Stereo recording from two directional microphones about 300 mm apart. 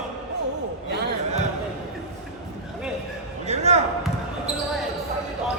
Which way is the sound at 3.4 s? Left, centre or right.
Right.